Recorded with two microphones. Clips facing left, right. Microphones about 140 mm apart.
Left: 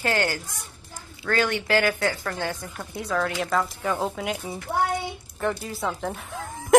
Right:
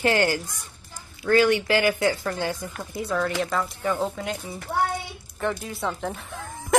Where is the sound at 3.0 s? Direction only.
Centre (ahead or behind).